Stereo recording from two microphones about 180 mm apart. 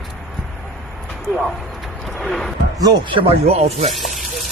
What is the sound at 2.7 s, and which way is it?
Speech, 20° right (ahead or behind).